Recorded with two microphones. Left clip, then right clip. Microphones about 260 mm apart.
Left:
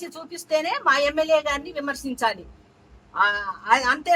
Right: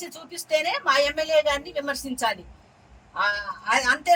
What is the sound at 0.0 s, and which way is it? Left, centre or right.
Speech, centre.